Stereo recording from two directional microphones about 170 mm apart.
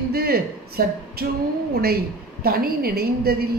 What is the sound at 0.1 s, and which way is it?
A man's voice, 65° right (ahead or behind).